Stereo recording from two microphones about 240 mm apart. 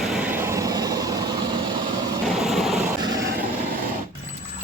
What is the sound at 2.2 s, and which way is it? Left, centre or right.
Vehicle, centre.